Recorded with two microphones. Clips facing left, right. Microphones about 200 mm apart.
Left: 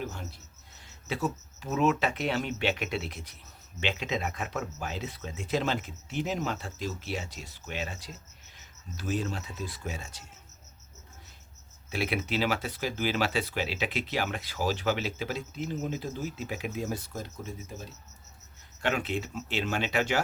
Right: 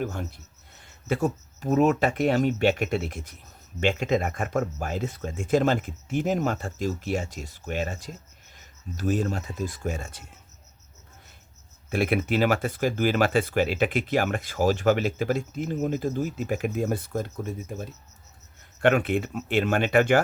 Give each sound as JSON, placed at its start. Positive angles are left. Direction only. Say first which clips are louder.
{"t": 0.0, "sound": "speech", "louder": "right 7 dB", "side_deg": -55}
{"t": 11.9, "sound": "speech", "louder": "right 7 dB", "side_deg": -50}